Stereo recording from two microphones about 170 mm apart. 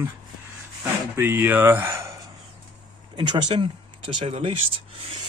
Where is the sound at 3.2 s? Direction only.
25° right (ahead or behind).